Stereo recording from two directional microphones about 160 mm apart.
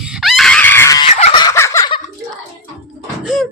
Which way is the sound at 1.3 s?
20° left (ahead or behind).